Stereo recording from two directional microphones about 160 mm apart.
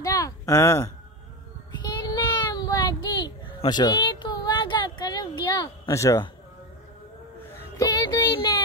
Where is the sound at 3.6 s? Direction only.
25° left (ahead or behind).